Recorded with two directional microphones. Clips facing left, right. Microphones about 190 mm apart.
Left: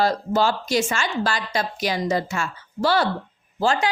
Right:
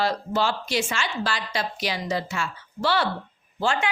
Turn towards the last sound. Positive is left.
turn(degrees=40)  # may be behind; listen again after turning